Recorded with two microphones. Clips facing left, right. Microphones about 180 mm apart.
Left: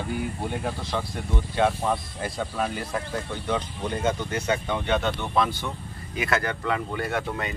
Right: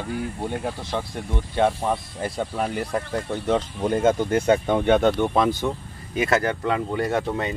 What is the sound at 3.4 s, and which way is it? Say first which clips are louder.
Speech: right 7 dB; 40° right (ahead or behind).